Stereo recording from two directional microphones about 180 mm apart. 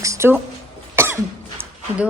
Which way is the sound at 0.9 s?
15° right (ahead or behind).